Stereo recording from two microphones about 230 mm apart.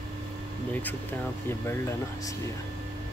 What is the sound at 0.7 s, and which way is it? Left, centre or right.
Speech, centre.